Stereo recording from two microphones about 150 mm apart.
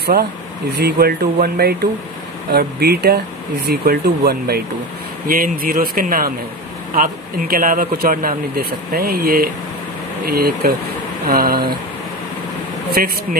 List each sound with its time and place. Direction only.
0.7 s speech: 90° right
5.3 s speech: 70° right (ahead or behind)
10.2 s speech: 90° right
11.2 s speech: 80° right
12.9 s speech: 90° right